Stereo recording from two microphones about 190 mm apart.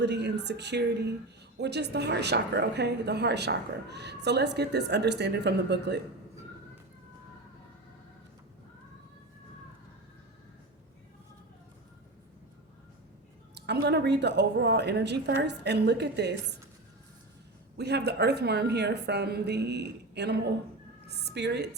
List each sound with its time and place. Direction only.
0.0 s a woman's voice: 60° right (ahead or behind)
13.8 s a woman's voice: 60° right (ahead or behind)
17.7 s a woman's voice: 60° right (ahead or behind)